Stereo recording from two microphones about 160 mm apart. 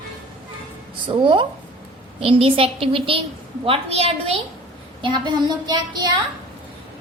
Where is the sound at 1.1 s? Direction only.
30° right (ahead or behind).